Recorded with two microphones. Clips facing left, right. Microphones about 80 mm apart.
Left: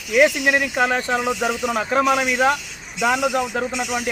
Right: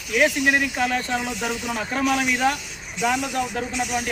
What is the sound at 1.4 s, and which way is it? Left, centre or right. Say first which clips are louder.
Speech: left 5 dB; left.